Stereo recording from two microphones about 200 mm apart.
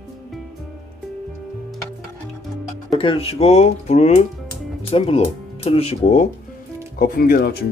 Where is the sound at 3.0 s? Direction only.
25° left (ahead or behind).